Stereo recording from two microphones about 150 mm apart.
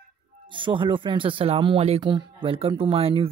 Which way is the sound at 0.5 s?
35° right (ahead or behind).